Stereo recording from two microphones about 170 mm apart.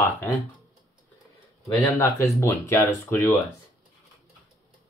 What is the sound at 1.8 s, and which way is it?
Speech, 15° left (ahead or behind).